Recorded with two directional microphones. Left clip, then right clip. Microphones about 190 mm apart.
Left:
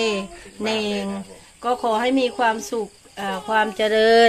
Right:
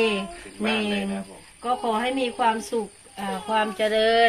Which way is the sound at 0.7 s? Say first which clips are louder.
Left 2 dB; 55° left (ahead or behind).